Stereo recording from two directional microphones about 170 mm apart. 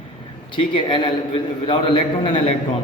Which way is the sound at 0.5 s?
30° left (ahead or behind).